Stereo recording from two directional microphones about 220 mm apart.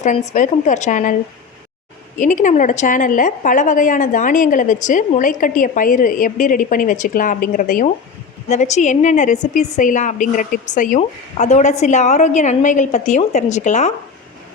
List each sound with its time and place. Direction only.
0.0 s a woman's voice: 35° left (ahead or behind)
2.1 s a woman's voice: 35° left (ahead or behind)